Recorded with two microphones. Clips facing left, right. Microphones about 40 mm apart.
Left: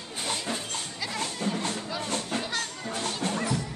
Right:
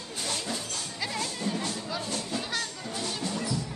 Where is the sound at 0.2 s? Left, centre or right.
Left.